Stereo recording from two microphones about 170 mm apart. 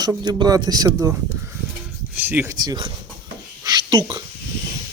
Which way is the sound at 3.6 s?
25° right (ahead or behind).